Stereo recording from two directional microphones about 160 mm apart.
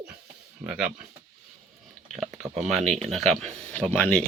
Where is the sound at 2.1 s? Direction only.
Centre (ahead or behind).